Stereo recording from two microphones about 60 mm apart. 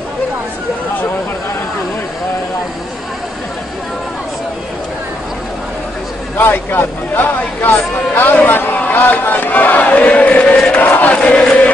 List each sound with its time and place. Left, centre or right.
6.3 s speech: left
9.1 s chant: left